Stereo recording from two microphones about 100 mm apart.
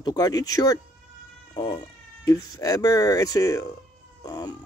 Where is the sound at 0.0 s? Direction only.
40° left (ahead or behind).